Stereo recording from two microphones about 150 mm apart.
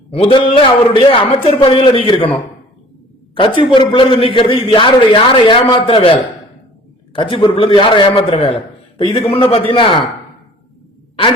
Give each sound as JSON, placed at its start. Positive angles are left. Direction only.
{"t": 0.1, "sound": "a man's voice", "side_deg": 40}